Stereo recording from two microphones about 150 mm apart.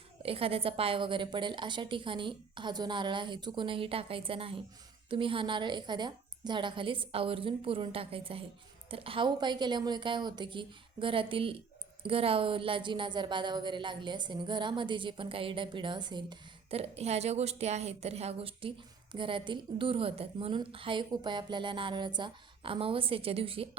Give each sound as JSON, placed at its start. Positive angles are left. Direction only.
{"t": 0.2, "sound": "a woman's voice", "side_deg": -40}